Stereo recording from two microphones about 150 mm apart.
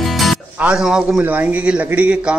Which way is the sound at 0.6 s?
5° right (ahead or behind).